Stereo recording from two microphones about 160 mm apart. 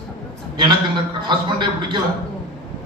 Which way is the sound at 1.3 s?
30° right (ahead or behind).